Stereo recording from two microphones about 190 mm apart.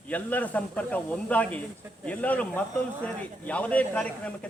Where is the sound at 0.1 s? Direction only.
10° left (ahead or behind).